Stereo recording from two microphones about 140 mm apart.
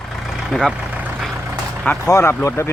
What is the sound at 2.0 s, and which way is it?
Speech, 20° left (ahead or behind).